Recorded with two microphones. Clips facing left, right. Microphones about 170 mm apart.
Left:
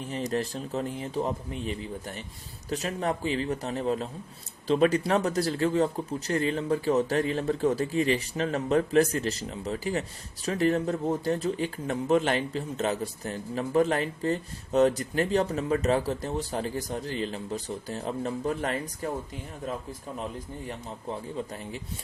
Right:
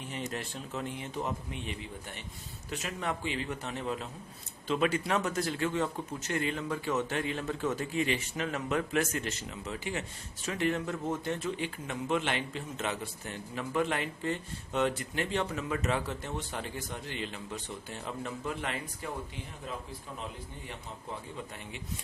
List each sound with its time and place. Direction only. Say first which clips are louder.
0.0 s speech: left 8 dB; 35° left (ahead or behind)